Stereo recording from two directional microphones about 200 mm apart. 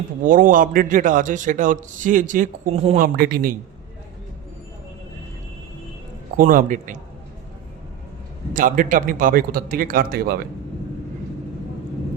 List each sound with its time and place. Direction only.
0.3 s a man's voice: 45° right (ahead or behind)
3.2 s a man's voice: 50° right (ahead or behind)
6.3 s a man's voice: 40° right (ahead or behind)
8.5 s a man's voice: 40° right (ahead or behind)